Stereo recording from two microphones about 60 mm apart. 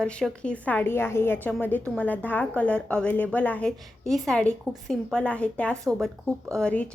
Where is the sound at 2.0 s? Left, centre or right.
Left.